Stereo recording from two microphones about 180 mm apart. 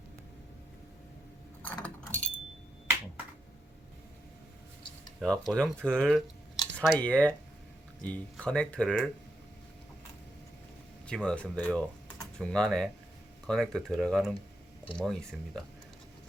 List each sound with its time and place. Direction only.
1.6 s keys jangling: 5° left (ahead or behind)
5.2 s speech: 5° left (ahead or behind)
11.0 s speech: 5° left (ahead or behind)